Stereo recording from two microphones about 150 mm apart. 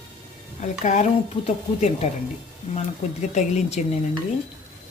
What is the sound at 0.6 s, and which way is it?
Speech, 50° left (ahead or behind).